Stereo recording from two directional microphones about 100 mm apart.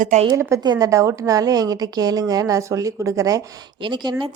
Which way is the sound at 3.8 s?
50° right (ahead or behind).